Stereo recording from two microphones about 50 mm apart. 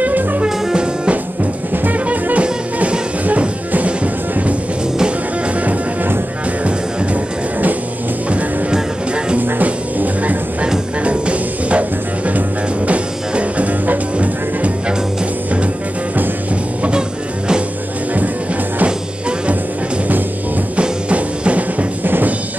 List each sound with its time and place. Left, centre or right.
0.0 s music: right
0.7 s music: centre
1.1 s music: right
8.3 s music: right
9.4 s music: right
20.7 s music: right
22.0 s music: right